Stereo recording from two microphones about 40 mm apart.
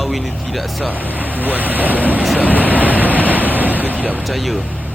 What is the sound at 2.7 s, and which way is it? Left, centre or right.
Waves, right.